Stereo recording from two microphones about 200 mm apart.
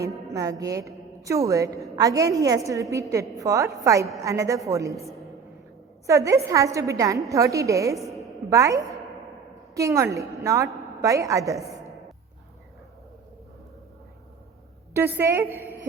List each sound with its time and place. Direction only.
0.3 s a woman's voice: 15° right (ahead or behind)
6.1 s a woman's voice: 15° right (ahead or behind)
14.9 s a woman's voice: 10° right (ahead or behind)